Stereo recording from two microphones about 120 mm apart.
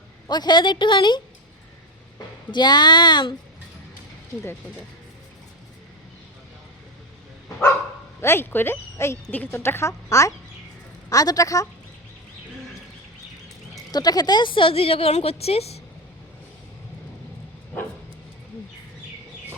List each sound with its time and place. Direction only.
0.3 s a woman's voice: 35° left (ahead or behind)
2.5 s a woman's voice: 35° left (ahead or behind)
8.2 s speech: 20° left (ahead or behind)
13.9 s a woman's voice: 35° left (ahead or behind); by 15.8 s 60° left (ahead or behind)